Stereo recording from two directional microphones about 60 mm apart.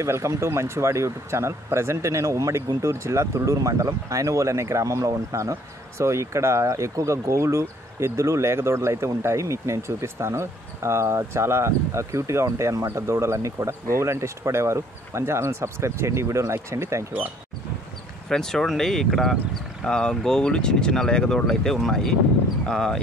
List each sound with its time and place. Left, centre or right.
0.0 s speech: right
18.3 s speech: centre